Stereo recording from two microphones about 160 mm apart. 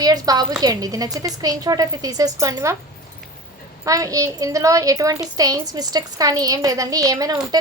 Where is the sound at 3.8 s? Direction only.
20° right (ahead or behind).